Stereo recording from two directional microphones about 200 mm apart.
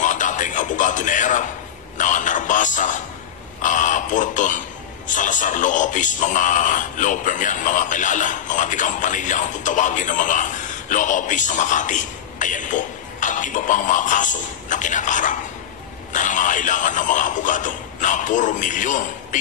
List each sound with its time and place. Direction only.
0.0 s music: 40° left (ahead or behind)
2.0 s a man's voice: 40° left (ahead or behind)